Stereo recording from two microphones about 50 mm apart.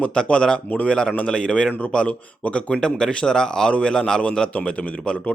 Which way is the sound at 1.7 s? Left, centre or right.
Left.